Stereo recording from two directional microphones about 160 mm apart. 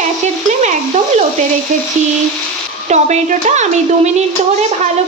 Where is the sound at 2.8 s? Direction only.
45° right (ahead or behind).